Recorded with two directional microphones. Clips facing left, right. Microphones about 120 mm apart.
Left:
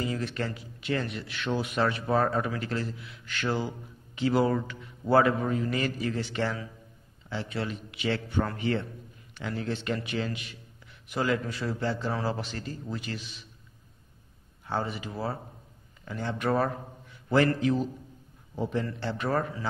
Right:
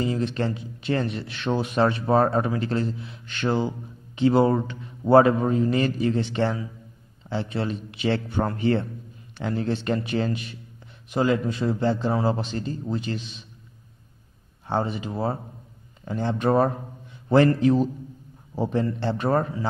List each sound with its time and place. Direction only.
0.0 s a man's voice: 25° right (ahead or behind)
11.1 s a man's voice: 20° right (ahead or behind)
14.7 s a man's voice: 25° right (ahead or behind)